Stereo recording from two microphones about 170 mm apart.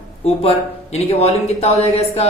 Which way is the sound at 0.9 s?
35° left (ahead or behind).